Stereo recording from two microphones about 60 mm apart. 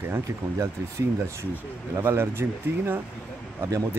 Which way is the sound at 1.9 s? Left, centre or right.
Right.